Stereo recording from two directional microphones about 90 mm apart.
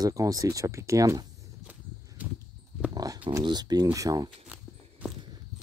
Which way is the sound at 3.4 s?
50° right (ahead or behind).